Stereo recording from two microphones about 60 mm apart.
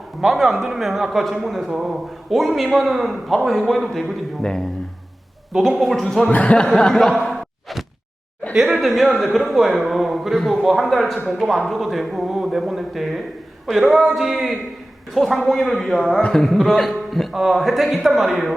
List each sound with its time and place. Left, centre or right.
0.2 s a man's voice: centre
5.8 s a man's voice: centre
6.3 s speech: left
6.7 s a sound: centre
8.5 s a man's voice: centre